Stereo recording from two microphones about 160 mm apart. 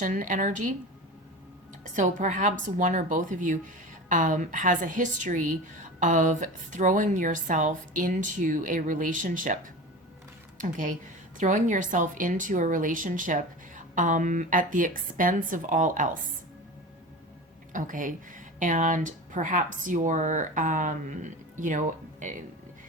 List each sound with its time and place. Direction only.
0.0 s a woman's voice: 55° right (ahead or behind)
1.8 s a woman's voice: 50° right (ahead or behind)
10.6 s a woman's voice: 55° right (ahead or behind)
17.7 s a woman's voice: 55° right (ahead or behind)